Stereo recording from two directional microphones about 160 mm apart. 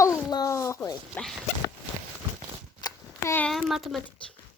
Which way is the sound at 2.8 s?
15° left (ahead or behind).